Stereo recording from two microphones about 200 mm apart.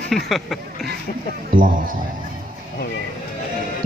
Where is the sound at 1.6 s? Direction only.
45° right (ahead or behind).